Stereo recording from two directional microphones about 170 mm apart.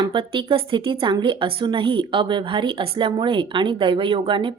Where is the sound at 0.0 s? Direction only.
30° right (ahead or behind).